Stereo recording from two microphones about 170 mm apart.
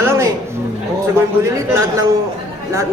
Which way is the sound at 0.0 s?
15° right (ahead or behind).